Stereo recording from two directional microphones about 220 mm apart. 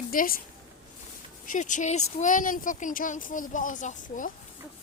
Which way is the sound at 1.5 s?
35° left (ahead or behind).